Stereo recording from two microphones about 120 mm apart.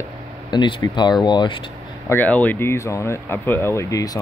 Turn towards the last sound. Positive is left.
turn(degrees=30)  # may be behind; listen again after turning